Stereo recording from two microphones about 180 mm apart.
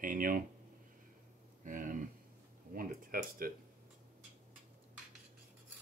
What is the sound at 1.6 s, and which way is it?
Speech, 45° right (ahead or behind).